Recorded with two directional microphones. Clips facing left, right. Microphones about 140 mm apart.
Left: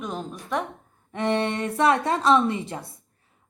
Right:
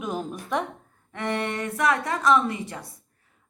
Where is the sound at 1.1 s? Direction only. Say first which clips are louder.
Left 4 dB; 25° left (ahead or behind).